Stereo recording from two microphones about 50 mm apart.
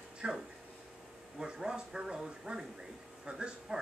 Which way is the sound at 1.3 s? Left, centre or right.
Centre.